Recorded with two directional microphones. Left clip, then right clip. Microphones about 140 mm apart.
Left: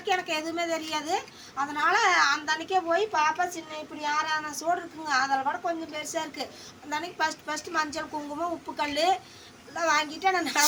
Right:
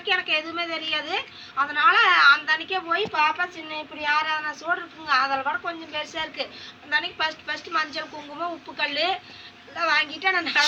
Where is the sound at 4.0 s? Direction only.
40° left (ahead or behind).